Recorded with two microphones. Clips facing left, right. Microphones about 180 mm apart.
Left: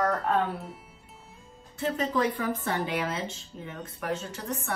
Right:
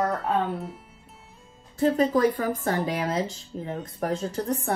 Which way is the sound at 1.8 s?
40° right (ahead or behind).